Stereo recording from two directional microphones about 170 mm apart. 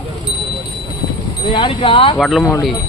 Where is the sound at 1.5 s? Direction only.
30° left (ahead or behind).